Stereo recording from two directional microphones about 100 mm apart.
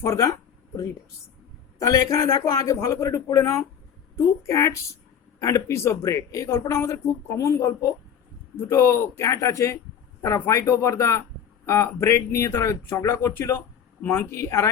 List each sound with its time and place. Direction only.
0.0 s a man's voice: 30° left (ahead or behind)
1.8 s a man's voice: 35° left (ahead or behind)